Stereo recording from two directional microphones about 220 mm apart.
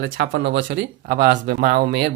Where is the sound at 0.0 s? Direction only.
55° right (ahead or behind).